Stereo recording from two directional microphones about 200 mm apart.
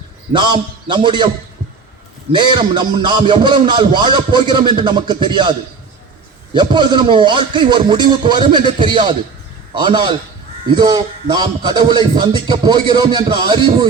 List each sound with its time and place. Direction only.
0.3 s speech: 20° right (ahead or behind)
2.3 s speech: 20° right (ahead or behind)